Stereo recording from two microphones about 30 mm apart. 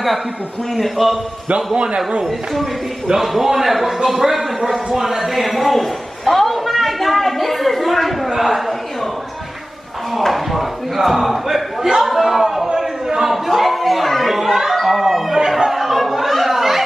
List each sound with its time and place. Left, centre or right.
0.7 s a man's voice: centre
3.2 s a man's voice: centre
10.2 s speech: centre
12.6 s a sound: right
13.5 s speech: centre
15.7 s a sound: centre